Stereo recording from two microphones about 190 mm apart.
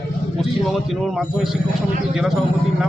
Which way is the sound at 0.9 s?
Centre (ahead or behind).